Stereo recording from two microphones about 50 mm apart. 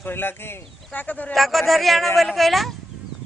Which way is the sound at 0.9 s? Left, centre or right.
Left.